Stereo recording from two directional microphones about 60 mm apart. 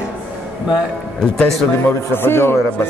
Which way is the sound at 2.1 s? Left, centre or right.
Left.